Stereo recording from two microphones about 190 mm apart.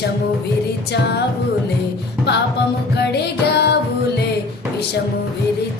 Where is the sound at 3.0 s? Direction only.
60° left (ahead or behind).